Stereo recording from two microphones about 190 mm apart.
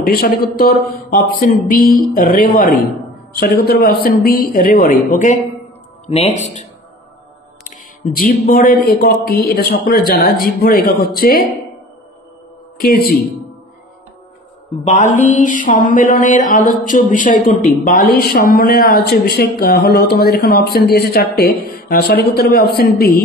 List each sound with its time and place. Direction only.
0.0 s a man's voice: 55° left (ahead or behind); by 6.6 s 35° left (ahead or behind)
7.6 s a sound: 45° left (ahead or behind)
8.8 s speech: 55° left (ahead or behind)
12.7 s speech: 50° left (ahead or behind)
14.9 s speech: 40° left (ahead or behind)